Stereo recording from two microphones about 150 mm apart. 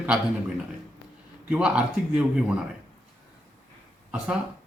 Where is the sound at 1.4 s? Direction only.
5° right (ahead or behind).